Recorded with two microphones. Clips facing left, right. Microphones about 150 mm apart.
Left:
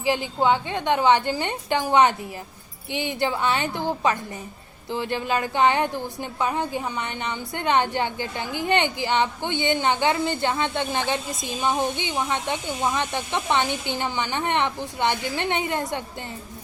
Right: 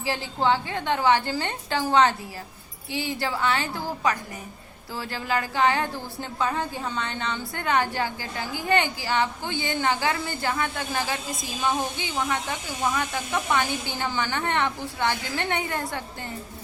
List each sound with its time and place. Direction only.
0.0 s a woman's voice: 15° left (ahead or behind)